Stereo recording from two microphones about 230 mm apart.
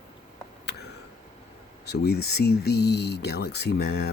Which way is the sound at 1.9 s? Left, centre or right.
Left.